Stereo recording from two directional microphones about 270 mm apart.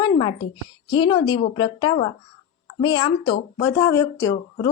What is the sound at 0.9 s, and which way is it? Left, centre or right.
Speech, centre.